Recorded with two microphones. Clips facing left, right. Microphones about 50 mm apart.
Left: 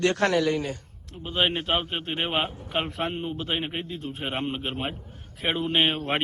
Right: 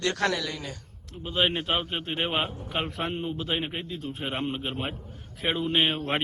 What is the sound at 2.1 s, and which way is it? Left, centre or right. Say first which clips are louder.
Speech: left 1 dB; centre.